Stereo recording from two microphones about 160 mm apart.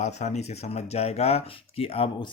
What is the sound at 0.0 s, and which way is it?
Speech, 45° left (ahead or behind).